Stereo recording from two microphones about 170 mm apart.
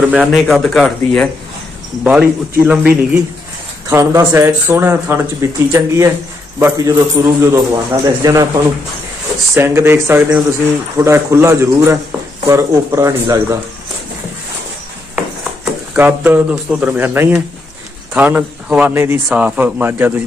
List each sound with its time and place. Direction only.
0.1 s a man's voice: 5° right (ahead or behind); by 8.5 s 20° right (ahead or behind)
9.5 s speech: 15° right (ahead or behind)
15.1 s speech: 10° right (ahead or behind)